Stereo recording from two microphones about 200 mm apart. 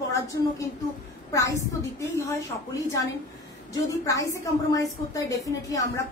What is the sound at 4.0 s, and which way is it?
Speech, 15° left (ahead or behind).